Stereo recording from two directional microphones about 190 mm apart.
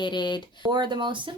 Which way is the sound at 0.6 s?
25° right (ahead or behind).